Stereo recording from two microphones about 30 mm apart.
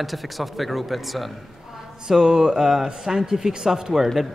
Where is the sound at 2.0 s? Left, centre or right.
Right.